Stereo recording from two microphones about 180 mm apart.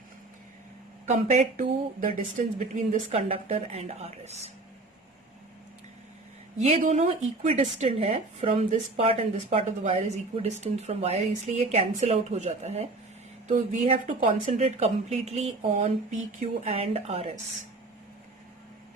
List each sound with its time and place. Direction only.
1.0 s speech: 40° right (ahead or behind)
6.7 s speech: 35° right (ahead or behind)